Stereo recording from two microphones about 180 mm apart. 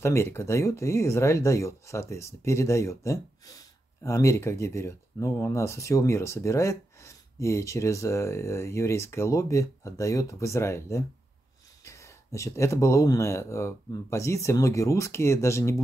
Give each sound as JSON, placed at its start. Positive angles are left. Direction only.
{"t": 0.0, "sound": "speech", "side_deg": 15}